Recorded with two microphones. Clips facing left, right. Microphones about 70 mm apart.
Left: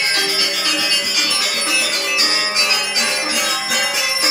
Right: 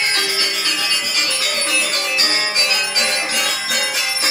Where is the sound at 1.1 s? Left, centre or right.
Right.